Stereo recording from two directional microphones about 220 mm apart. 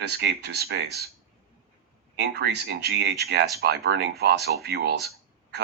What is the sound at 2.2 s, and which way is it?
Speech, 50° right (ahead or behind).